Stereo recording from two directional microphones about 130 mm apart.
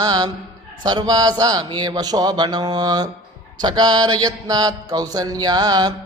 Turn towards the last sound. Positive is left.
turn(degrees=-30)  # may be behind; listen again after turning